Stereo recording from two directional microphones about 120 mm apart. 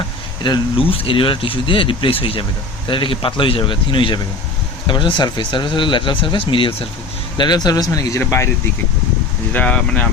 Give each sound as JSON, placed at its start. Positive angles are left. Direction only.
{"t": 0.4, "sound": "speech", "side_deg": 45}
{"t": 7.3, "sound": "speech", "side_deg": 35}
{"t": 9.5, "sound": "speech", "side_deg": 10}